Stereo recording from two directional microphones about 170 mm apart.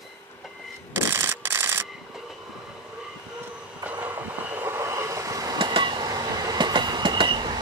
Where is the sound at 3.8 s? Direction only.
10° right (ahead or behind).